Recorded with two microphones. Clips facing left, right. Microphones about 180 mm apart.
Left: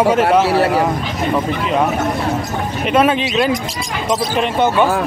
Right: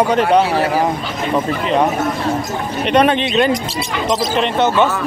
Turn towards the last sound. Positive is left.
turn(degrees=10)  # may be behind; listen again after turning